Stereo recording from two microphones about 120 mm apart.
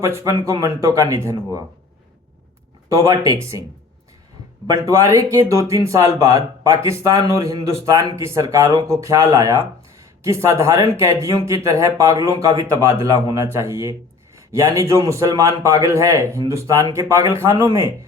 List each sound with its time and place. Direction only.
0.0 s speech: 25° right (ahead or behind)
2.9 s speech: 30° right (ahead or behind)
4.6 s speech: 25° right (ahead or behind)